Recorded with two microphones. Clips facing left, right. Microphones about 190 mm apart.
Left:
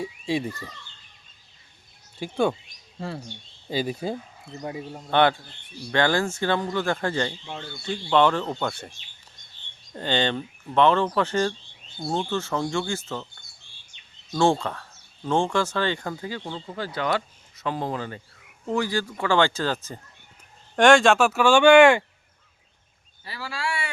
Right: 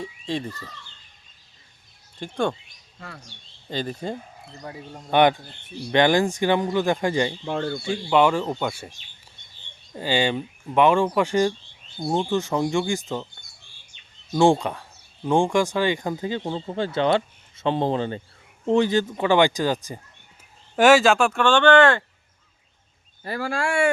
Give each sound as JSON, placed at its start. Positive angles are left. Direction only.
{"t": 0.0, "sound": "speech", "side_deg": 10}
{"t": 2.1, "sound": "speech", "side_deg": 5}
{"t": 3.0, "sound": "speech", "side_deg": 30}
{"t": 3.7, "sound": "speech", "side_deg": 10}
{"t": 5.1, "sound": "speech", "side_deg": -15}
{"t": 7.4, "sound": "speech", "side_deg": -55}
{"t": 7.9, "sound": "speech", "side_deg": -10}
{"t": 9.9, "sound": "speech", "side_deg": -10}
{"t": 14.3, "sound": "speech", "side_deg": -15}
{"t": 23.2, "sound": "speech", "side_deg": -50}